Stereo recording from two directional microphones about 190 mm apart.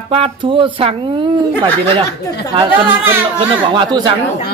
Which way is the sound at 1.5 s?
10° left (ahead or behind).